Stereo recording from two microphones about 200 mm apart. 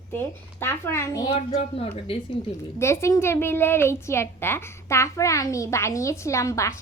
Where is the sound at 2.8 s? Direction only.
15° left (ahead or behind).